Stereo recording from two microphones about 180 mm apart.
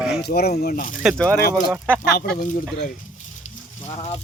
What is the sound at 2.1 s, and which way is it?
Speech, 55° left (ahead or behind).